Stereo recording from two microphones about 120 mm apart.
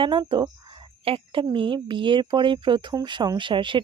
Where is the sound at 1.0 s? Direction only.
50° right (ahead or behind).